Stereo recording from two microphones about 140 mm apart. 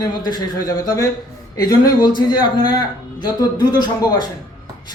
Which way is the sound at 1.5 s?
30° left (ahead or behind).